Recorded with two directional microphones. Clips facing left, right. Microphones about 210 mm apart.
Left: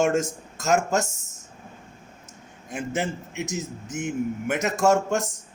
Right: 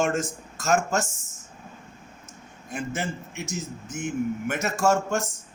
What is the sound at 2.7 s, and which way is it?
A man's voice, 15° left (ahead or behind).